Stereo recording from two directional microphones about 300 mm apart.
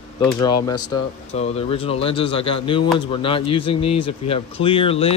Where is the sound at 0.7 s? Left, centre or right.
Left.